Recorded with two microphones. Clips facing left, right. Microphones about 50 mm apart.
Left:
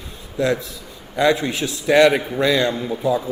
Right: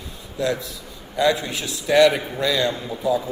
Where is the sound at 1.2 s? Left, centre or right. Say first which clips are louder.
Left 3 dB; left.